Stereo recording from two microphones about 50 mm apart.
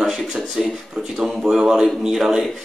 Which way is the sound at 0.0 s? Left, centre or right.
Centre.